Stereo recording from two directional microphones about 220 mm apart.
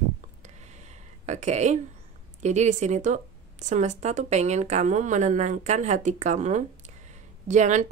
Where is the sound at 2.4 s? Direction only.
30° right (ahead or behind).